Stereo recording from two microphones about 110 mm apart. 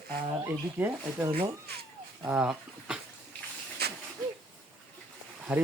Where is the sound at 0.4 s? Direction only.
20° right (ahead or behind).